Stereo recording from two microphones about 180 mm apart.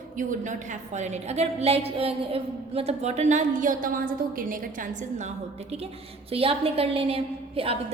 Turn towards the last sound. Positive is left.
turn(degrees=-30)  # may be behind; listen again after turning